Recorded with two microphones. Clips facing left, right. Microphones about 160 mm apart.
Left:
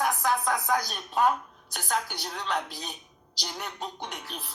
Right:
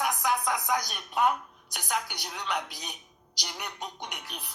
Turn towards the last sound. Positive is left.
turn(degrees=-15)  # may be behind; listen again after turning